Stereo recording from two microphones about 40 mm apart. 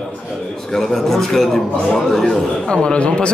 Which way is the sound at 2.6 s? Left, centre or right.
Left.